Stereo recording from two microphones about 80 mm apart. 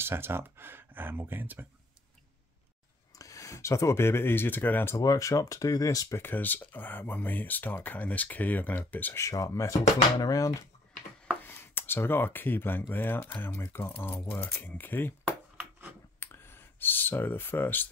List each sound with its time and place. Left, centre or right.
0.0 s speech: right
3.2 s speech: left
4.9 s speech: left
6.1 s speech: left
9.3 s speech: left
11.4 s speech: left
16.2 s clicking: left